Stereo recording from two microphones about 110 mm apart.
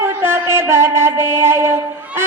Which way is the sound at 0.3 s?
25° right (ahead or behind).